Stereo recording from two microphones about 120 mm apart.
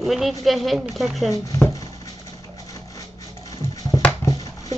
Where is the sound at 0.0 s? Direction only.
Centre (ahead or behind).